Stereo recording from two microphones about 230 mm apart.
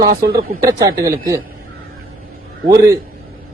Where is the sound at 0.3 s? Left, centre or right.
Right.